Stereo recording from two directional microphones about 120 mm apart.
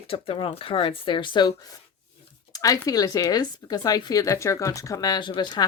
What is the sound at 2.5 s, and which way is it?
Speech, 30° left (ahead or behind).